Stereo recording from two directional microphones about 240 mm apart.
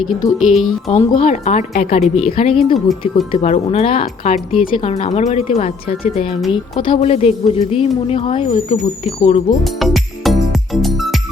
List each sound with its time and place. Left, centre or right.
0.3 s speech: centre
0.9 s speech: left
9.6 s music: centre